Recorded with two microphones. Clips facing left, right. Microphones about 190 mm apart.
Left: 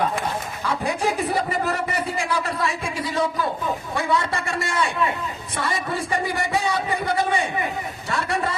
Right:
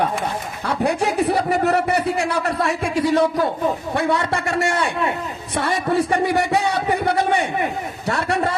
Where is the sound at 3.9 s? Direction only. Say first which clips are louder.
Even; 65° right (ahead or behind).